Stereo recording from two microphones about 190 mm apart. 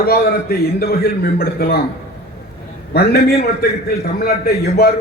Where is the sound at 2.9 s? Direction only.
55° left (ahead or behind).